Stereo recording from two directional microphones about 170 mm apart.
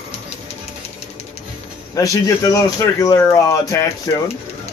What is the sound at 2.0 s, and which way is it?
Speech, 20° left (ahead or behind).